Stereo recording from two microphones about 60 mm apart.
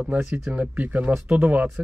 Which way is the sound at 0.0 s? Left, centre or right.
Centre.